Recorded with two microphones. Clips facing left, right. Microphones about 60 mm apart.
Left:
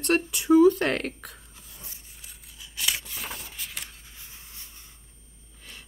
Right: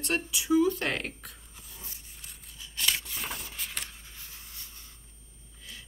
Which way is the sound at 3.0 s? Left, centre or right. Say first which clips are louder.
Even; centre.